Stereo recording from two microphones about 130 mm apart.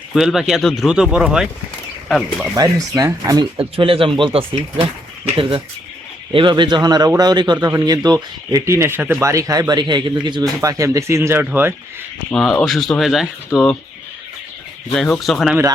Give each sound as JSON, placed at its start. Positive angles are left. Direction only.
{"t": 0.1, "sound": "speech", "side_deg": 0}
{"t": 2.6, "sound": "speech", "side_deg": -25}
{"t": 3.6, "sound": "speech", "side_deg": -45}
{"t": 10.6, "sound": "speech", "side_deg": -25}
{"t": 12.3, "sound": "speech", "side_deg": 5}
{"t": 14.9, "sound": "speech", "side_deg": 5}